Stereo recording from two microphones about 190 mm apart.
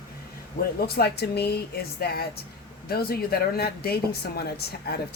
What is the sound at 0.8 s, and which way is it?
A woman's voice, 55° left (ahead or behind).